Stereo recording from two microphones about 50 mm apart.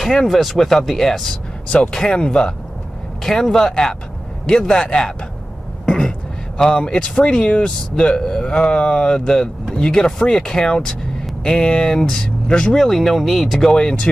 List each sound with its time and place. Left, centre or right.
0.3 s speech: centre
1.7 s speech: centre
3.3 s speech: centre
5.9 s a sound: centre
6.6 s speech: centre
12.7 s speech: centre
13.7 s speech: centre